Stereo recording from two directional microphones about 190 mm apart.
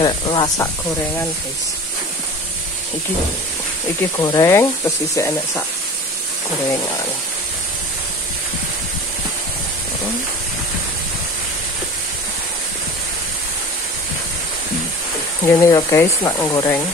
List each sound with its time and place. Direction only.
0.0 s speech: 25° left (ahead or behind)
4.2 s speech: 20° left (ahead or behind)
15.4 s speech: 15° left (ahead or behind)